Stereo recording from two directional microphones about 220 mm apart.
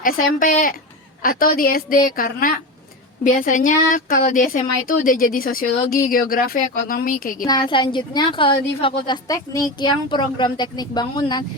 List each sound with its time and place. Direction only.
0.0 s speech: 40° left (ahead or behind)
7.4 s a woman's voice: 20° left (ahead or behind)